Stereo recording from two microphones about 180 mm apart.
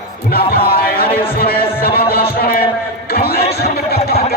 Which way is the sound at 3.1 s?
60° left (ahead or behind).